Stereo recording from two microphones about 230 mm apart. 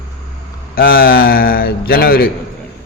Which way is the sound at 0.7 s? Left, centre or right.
Left.